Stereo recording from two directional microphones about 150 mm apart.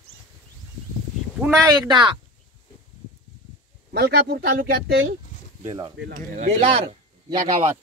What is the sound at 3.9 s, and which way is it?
Speech, 90° right.